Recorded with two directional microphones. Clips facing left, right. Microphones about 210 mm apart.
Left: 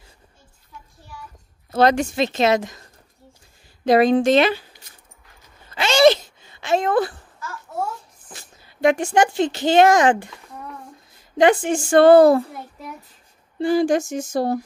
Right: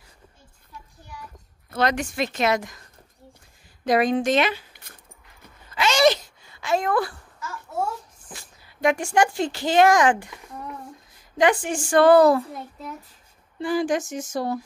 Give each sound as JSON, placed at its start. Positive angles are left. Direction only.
{"t": 1.8, "sound": "a woman's voice", "side_deg": 30}
{"t": 3.8, "sound": "a woman's voice", "side_deg": 30}
{"t": 5.8, "sound": "a sound", "side_deg": 30}
{"t": 8.3, "sound": "speech", "side_deg": 25}
{"t": 11.3, "sound": "a woman's voice", "side_deg": 25}
{"t": 13.6, "sound": "a woman's voice", "side_deg": 25}